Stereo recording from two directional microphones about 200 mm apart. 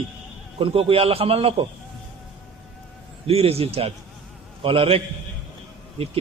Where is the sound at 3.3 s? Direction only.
30° right (ahead or behind).